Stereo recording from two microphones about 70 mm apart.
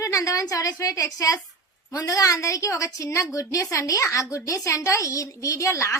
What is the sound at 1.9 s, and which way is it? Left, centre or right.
A woman's voice, left.